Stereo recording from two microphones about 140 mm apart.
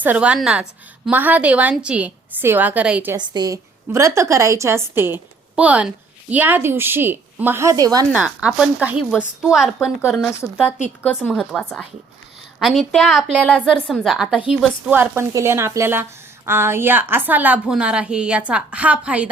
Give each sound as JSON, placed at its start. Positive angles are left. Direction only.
{"t": 0.0, "sound": "a woman's voice", "side_deg": -10}
{"t": 3.2, "sound": "a woman's voice", "side_deg": -30}
{"t": 8.1, "sound": "a woman's voice", "side_deg": -10}